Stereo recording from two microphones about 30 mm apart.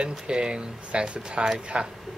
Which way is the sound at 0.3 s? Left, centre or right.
Right.